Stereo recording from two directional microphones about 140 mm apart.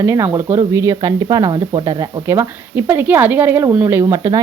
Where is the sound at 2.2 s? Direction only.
15° right (ahead or behind).